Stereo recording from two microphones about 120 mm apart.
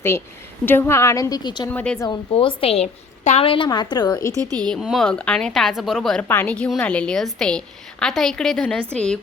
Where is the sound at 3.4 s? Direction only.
50° left (ahead or behind).